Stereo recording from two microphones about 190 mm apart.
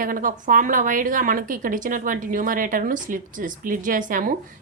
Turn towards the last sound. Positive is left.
turn(degrees=-45)  # may be behind; listen again after turning